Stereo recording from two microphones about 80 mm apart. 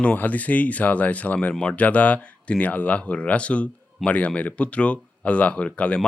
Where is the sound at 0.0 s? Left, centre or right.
Centre.